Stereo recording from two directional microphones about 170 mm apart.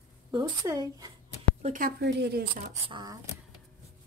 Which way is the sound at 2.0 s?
80° right.